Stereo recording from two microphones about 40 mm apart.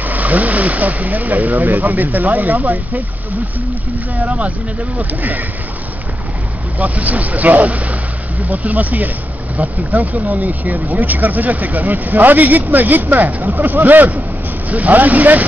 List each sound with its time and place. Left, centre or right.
0.0 s speech: right
4.2 s speech: right
4.9 s speech: right
6.8 s speech: right